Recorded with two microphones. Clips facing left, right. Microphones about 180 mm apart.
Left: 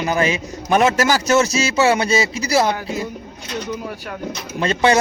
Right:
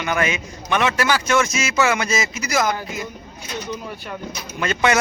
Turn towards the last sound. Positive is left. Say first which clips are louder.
# left 3 dB
turn(degrees=30)  # may be behind; listen again after turning